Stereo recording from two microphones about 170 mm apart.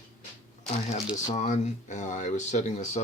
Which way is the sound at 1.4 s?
45° left (ahead or behind).